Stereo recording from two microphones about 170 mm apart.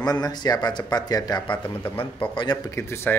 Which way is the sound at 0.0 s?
25° left (ahead or behind).